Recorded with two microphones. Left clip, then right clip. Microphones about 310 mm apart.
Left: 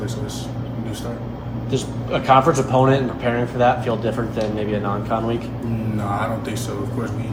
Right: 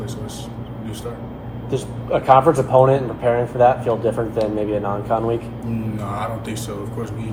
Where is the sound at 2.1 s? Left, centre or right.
Centre.